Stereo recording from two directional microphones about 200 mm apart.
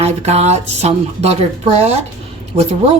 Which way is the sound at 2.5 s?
20° right (ahead or behind).